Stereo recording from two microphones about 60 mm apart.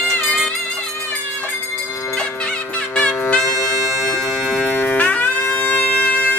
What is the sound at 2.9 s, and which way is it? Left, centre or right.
Music, centre.